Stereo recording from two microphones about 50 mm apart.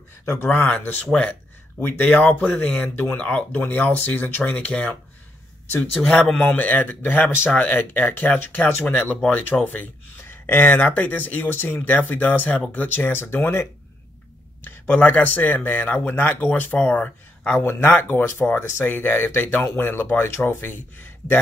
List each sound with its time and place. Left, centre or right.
0.2 s speech: left
0.5 s speech: left
1.8 s speech: left; by 6.4 s centre
6.4 s speech: left
10.4 s speech: left
12.8 s speech: left
14.6 s speech: left
17.5 s speech: left